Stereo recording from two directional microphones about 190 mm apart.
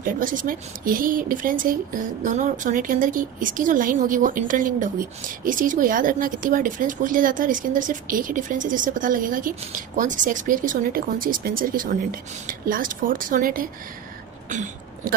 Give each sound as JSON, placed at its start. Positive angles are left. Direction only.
{"t": 0.0, "sound": "speech", "side_deg": -45}